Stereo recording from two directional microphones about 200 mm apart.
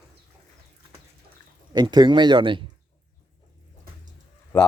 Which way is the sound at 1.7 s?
20° right (ahead or behind).